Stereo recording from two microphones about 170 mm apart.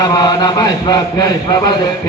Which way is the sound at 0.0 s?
25° left (ahead or behind).